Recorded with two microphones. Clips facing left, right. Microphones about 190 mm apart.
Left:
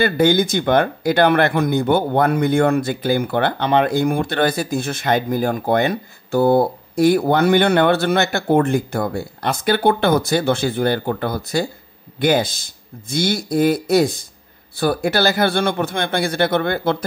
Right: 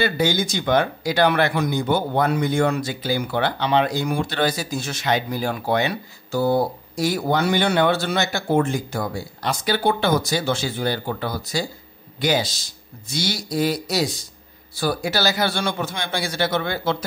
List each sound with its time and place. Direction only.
0.0 s speech: 55° left (ahead or behind)